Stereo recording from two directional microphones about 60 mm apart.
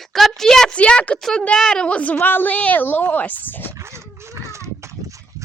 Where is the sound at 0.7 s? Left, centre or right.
Left.